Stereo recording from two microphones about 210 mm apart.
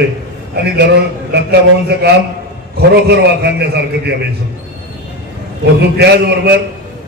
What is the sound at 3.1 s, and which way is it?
A man's voice, 50° right (ahead or behind).